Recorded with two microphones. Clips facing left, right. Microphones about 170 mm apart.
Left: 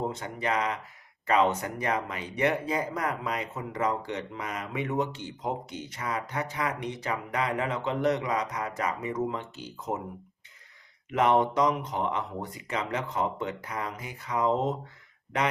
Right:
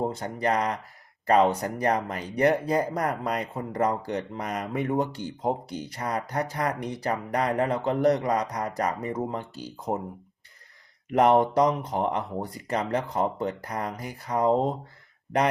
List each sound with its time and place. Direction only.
0.0 s speech: 35° right (ahead or behind)
11.1 s speech: 40° right (ahead or behind)